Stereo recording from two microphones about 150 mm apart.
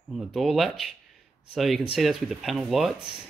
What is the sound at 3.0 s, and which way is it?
Speech, 30° right (ahead or behind).